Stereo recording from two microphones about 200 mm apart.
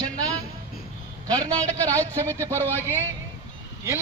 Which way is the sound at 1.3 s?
5° left (ahead or behind).